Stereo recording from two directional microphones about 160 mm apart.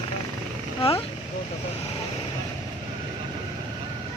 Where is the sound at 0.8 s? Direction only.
35° left (ahead or behind).